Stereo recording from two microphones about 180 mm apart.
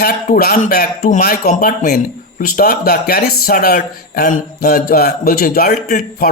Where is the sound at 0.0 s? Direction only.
55° left (ahead or behind).